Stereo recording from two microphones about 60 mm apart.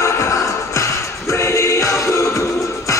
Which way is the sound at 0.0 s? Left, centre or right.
Left.